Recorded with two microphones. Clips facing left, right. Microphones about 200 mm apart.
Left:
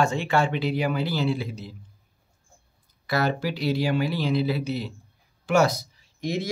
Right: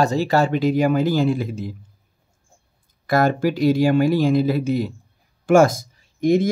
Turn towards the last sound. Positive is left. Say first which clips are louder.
# right 11 dB
turn(degrees=-50)  # may be behind; listen again after turning